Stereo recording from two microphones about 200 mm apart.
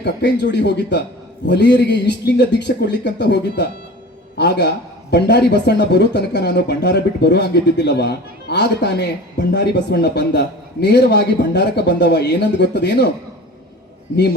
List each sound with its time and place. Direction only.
0.0 s speech: 60° left (ahead or behind)